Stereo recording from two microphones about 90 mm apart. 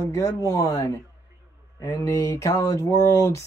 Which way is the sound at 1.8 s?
35° left (ahead or behind).